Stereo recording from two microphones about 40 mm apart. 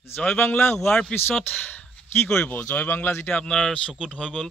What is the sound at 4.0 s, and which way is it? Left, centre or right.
Speech, left.